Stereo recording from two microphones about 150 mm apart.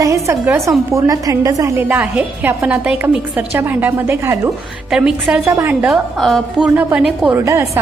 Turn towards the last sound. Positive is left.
turn(degrees=-20)  # may be behind; listen again after turning